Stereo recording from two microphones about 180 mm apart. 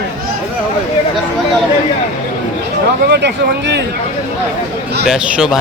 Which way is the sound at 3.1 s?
70° right (ahead or behind).